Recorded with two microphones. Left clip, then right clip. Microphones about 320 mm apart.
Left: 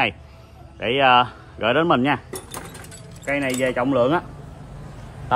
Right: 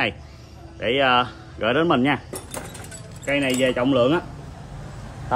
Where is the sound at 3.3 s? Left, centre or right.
Centre.